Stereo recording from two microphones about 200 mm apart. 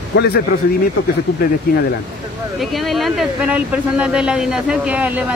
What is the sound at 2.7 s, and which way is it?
A woman's voice, centre (ahead or behind).